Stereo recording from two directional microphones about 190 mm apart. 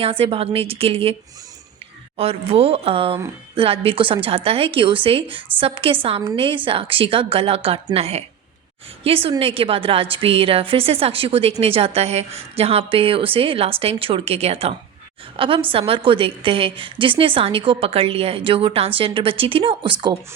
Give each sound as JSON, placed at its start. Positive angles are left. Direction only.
{"t": 0.0, "sound": "a woman's voice", "side_deg": -30}
{"t": 2.1, "sound": "a woman's voice", "side_deg": -30}